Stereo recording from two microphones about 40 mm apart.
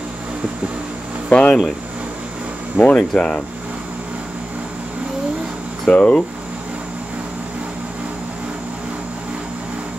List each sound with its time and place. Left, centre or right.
1.3 s speech: left
2.8 s speech: right
3.1 s speech: centre
5.9 s speech: left